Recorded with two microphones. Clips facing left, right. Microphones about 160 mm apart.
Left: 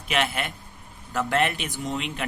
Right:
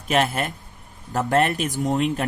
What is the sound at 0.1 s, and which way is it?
Speech, 40° right (ahead or behind).